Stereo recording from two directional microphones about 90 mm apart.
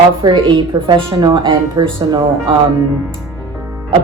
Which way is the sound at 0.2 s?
55° right (ahead or behind).